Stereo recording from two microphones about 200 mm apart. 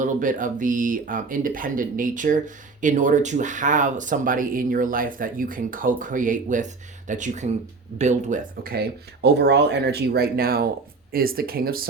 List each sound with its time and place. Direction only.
0.0 s speech: 40° right (ahead or behind)